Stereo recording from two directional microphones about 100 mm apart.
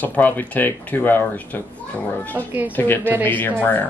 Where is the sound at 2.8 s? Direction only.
20° left (ahead or behind).